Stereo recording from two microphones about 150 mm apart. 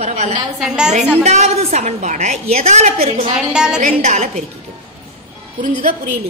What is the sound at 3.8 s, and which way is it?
Speech, 55° right (ahead or behind).